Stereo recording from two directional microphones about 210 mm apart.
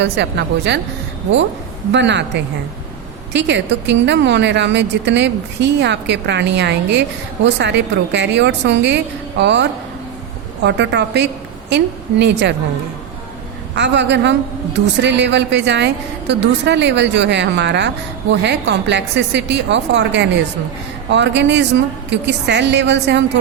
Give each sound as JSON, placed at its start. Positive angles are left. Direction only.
{"t": 0.0, "sound": "a woman's voice", "side_deg": -55}
{"t": 1.9, "sound": "a woman's voice", "side_deg": -55}
{"t": 13.7, "sound": "a woman's voice", "side_deg": -55}